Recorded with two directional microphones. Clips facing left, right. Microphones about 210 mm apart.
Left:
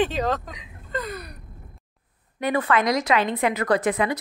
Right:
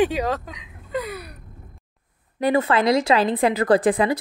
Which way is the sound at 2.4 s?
30° right (ahead or behind).